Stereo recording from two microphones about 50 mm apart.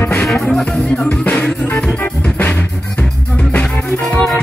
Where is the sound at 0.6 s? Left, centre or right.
Centre.